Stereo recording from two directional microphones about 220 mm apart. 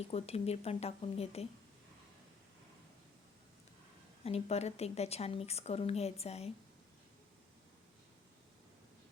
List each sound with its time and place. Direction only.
0.0 s speech: 25° left (ahead or behind)
4.2 s speech: 30° left (ahead or behind)